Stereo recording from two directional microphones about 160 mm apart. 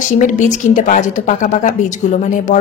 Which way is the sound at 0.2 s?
50° left (ahead or behind).